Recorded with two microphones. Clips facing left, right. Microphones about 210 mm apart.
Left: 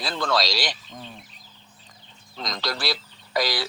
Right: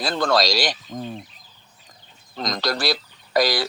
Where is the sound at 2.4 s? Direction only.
40° right (ahead or behind).